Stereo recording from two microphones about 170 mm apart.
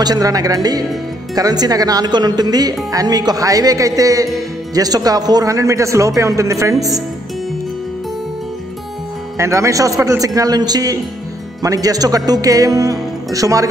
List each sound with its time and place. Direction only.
0.0 s speech: 20° right (ahead or behind)
9.4 s speech: 15° right (ahead or behind)